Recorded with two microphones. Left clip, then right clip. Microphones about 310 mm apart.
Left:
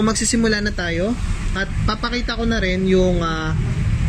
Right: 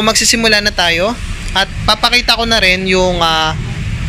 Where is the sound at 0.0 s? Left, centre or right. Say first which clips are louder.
Right 9 dB; centre.